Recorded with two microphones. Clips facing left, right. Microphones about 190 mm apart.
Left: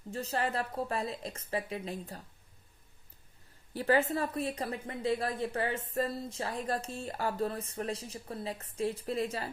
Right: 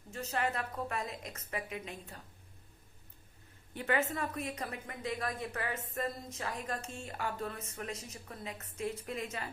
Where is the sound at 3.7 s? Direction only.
35° left (ahead or behind).